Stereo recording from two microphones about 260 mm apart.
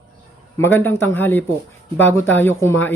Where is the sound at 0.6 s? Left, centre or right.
Centre.